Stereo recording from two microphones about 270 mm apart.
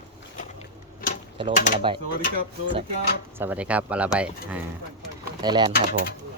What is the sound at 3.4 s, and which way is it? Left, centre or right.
Speech, centre.